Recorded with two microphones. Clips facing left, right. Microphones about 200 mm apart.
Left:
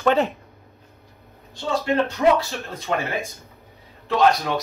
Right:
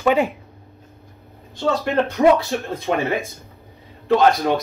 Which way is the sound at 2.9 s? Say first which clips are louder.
Right 3 dB; 55° right (ahead or behind).